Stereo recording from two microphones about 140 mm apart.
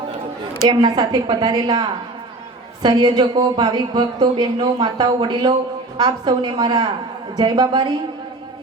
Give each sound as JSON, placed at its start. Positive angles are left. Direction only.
{"t": 0.7, "sound": "a woman's voice", "side_deg": -30}